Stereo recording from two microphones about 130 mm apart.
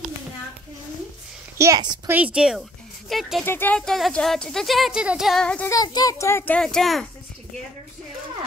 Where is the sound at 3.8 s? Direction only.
5° left (ahead or behind).